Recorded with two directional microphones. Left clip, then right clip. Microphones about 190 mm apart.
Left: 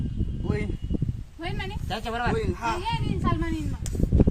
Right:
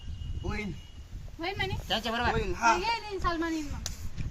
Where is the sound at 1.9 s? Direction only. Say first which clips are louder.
Left 2 dB; 5° right (ahead or behind).